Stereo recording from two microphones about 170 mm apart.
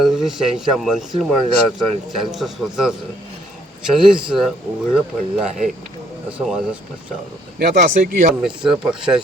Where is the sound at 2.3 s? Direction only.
Centre (ahead or behind).